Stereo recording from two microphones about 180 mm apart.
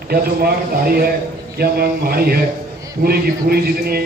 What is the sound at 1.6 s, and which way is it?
A man's voice, 55° right (ahead or behind).